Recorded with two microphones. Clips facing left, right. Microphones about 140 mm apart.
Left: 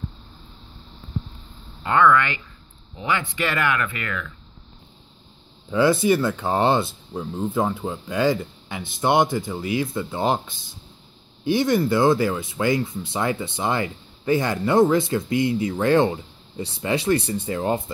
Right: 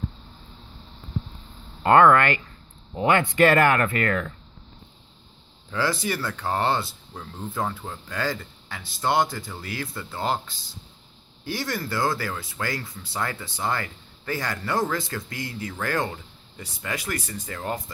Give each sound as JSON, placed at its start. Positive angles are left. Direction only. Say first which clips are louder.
{"t": 1.8, "sound": "speech", "louder": "right 2 dB", "side_deg": -50}
{"t": 5.7, "sound": "speech", "louder": "left 8 dB", "side_deg": 20}